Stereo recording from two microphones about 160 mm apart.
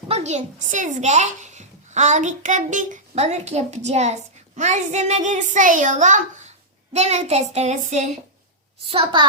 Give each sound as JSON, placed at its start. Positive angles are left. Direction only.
{"t": 0.1, "sound": "a child's voice", "side_deg": -45}
{"t": 8.9, "sound": "a child's voice", "side_deg": -35}